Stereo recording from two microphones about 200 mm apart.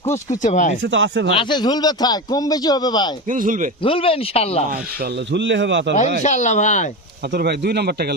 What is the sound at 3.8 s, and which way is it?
Speech, 25° left (ahead or behind).